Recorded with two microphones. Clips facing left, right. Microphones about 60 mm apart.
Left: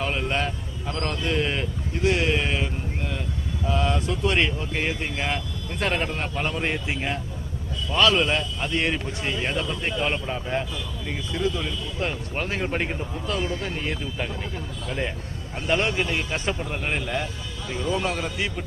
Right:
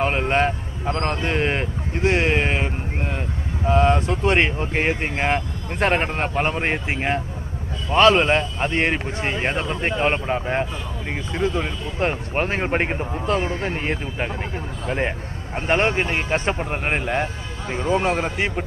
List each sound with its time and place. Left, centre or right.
0.0 s speech: right